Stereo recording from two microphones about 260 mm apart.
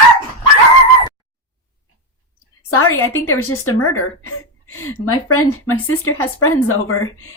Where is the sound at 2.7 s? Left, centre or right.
Left.